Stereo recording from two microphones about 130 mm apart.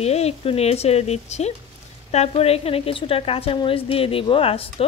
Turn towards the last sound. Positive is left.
turn(degrees=45)  # may be behind; listen again after turning